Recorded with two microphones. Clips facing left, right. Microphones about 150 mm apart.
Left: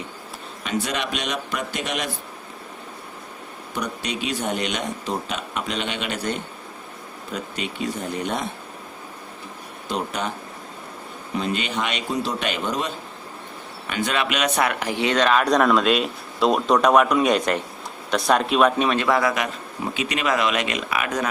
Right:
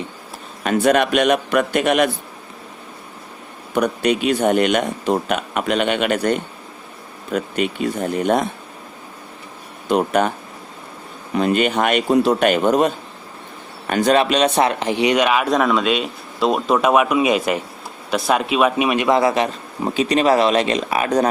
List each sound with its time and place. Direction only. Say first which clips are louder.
0.6 s speech: right 10 dB; 55° right (ahead or behind)
3.8 s speech: right 10 dB; 55° right (ahead or behind)
9.9 s speech: right 10 dB; 55° right (ahead or behind)
11.3 s a man's voice: right 8 dB; 55° right (ahead or behind); by 21.2 s 35° right (ahead or behind)